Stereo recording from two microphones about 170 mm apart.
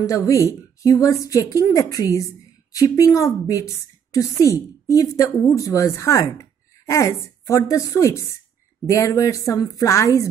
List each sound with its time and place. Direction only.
0.0 s a woman's voice: 20° left (ahead or behind)